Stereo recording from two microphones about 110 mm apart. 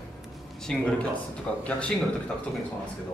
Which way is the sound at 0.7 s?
5° left (ahead or behind).